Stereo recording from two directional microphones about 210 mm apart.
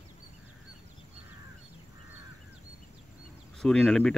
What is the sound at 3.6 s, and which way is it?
Cricket, 5° left (ahead or behind).